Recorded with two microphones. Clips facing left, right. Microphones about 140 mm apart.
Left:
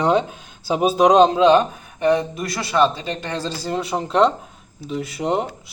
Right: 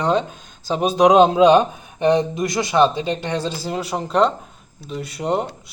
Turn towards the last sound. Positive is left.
turn(degrees=5)  # may be behind; listen again after turning